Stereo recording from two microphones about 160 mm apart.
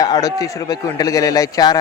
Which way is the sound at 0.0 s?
25° left (ahead or behind).